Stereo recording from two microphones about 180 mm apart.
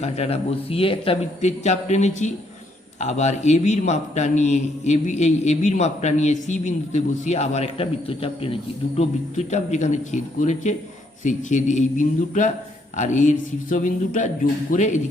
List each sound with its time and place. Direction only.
0.0 s a man's voice: 35° left (ahead or behind)